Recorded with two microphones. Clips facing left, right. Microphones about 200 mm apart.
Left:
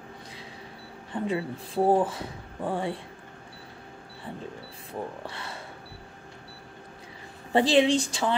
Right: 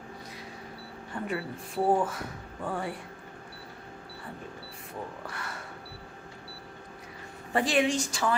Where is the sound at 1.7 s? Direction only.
30° left (ahead or behind).